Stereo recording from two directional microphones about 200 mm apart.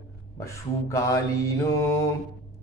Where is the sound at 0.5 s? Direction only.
15° left (ahead or behind).